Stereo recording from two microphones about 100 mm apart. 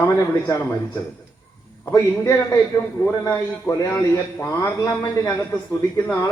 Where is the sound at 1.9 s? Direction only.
25° left (ahead or behind).